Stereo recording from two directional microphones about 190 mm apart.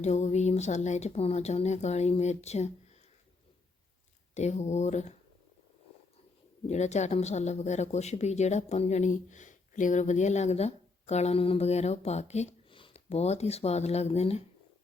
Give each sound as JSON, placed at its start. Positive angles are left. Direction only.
{"t": 0.0, "sound": "speech", "side_deg": 35}
{"t": 4.4, "sound": "speech", "side_deg": 35}
{"t": 6.7, "sound": "speech", "side_deg": 35}